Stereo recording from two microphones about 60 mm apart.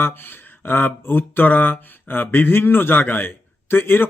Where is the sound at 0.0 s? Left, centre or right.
Left.